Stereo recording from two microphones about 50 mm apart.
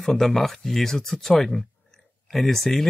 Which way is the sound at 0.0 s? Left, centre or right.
Centre.